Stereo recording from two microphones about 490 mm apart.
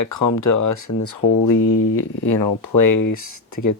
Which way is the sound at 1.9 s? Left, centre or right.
Left.